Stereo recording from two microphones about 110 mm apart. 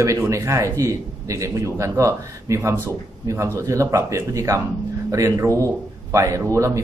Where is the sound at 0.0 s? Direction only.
25° right (ahead or behind).